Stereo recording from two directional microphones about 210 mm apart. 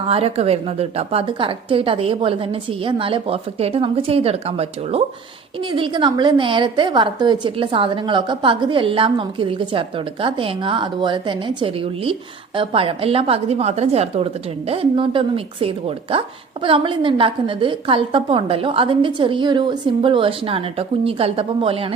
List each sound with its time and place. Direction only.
0.1 s speech: 30° right (ahead or behind)